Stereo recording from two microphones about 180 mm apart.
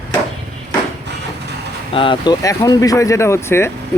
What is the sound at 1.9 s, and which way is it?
Speech, 30° left (ahead or behind).